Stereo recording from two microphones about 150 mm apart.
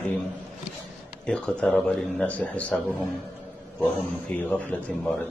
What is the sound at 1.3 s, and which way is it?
A man's voice, 5° left (ahead or behind).